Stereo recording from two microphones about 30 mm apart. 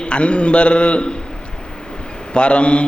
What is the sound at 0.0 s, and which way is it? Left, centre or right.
Mantra, left.